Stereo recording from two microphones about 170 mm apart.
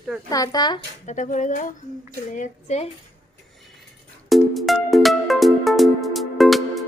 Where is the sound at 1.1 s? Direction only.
45° left (ahead or behind).